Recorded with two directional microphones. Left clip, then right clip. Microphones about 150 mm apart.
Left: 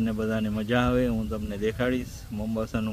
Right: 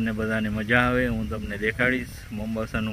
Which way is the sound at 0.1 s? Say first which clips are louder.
Right 2 dB; 5° left (ahead or behind).